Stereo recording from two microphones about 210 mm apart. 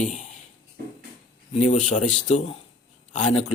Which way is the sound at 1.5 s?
35° left (ahead or behind).